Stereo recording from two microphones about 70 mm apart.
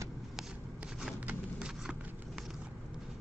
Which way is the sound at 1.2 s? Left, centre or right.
Right.